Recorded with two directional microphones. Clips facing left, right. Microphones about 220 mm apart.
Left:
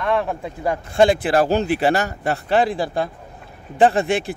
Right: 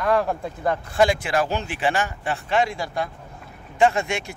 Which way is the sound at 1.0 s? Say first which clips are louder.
Left 5 dB; 35° left (ahead or behind).